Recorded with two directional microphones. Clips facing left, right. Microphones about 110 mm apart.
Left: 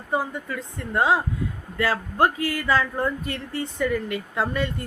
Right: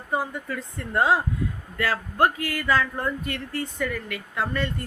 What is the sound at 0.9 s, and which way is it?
Speech, 20° left (ahead or behind).